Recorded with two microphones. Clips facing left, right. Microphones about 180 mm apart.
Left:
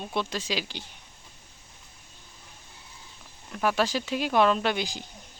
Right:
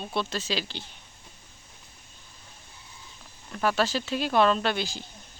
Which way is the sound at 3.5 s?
10° left (ahead or behind).